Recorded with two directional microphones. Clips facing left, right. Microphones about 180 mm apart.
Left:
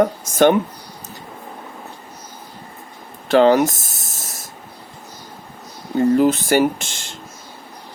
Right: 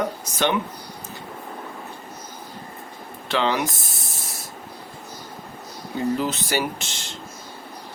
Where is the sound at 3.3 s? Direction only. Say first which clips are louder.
Left 10 dB; 45° left (ahead or behind).